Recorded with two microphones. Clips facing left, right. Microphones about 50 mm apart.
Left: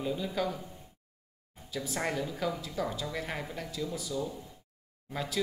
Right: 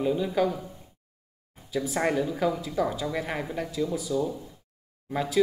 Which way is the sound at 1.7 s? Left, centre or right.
Centre.